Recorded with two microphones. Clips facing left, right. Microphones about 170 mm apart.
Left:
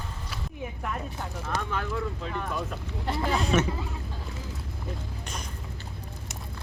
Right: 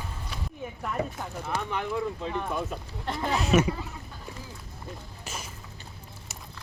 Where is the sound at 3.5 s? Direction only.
5° right (ahead or behind).